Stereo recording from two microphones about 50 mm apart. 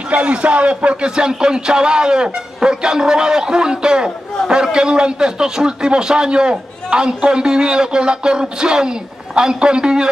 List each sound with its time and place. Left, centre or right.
0.1 s a man's voice: right